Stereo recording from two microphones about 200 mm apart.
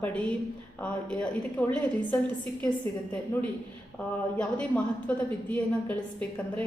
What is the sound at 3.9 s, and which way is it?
A woman's voice, 5° left (ahead or behind).